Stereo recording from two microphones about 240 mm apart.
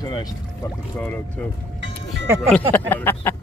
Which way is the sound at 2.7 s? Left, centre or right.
Centre.